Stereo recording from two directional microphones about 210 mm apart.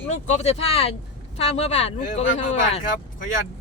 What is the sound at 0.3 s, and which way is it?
Speech, 30° left (ahead or behind).